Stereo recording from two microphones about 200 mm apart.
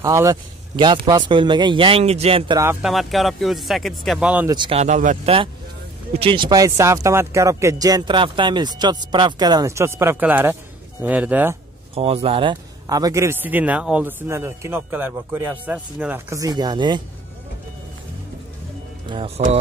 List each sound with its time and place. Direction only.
0.0 s speech: 15° right (ahead or behind)
2.8 s speech: centre (ahead or behind)
4.5 s speech: 25° right (ahead or behind); by 11.5 s 10° right (ahead or behind)
11.9 s speech: 30° right (ahead or behind)
19.0 s speech: 25° right (ahead or behind)